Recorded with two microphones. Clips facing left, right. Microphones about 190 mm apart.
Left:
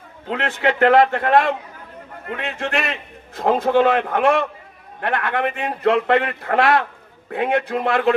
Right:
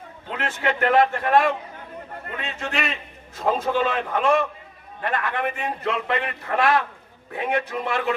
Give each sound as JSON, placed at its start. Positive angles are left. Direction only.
{"t": 0.3, "sound": "a man's voice", "side_deg": 70}
{"t": 2.6, "sound": "a man's voice", "side_deg": 60}